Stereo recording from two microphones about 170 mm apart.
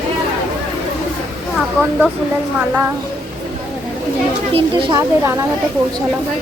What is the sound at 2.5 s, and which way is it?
Speech, 10° right (ahead or behind).